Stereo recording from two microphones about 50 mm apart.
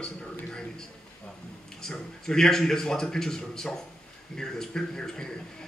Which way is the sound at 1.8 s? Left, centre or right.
Centre.